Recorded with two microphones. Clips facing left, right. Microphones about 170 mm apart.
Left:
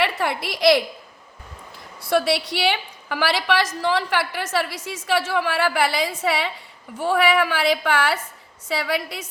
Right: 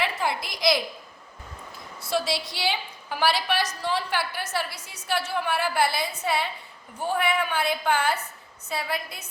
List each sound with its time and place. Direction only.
0.0 s a woman's voice: 65° left (ahead or behind)
2.0 s a woman's voice: 65° left (ahead or behind); by 8.2 s 90° left
8.6 s a woman's voice: 80° left